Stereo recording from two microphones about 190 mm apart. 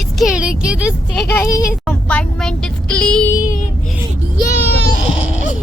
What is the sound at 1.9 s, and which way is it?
Speech, 5° left (ahead or behind).